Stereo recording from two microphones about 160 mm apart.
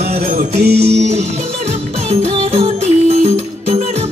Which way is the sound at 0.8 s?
40° right (ahead or behind).